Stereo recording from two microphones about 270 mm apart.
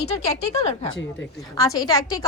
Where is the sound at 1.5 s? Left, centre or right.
Centre.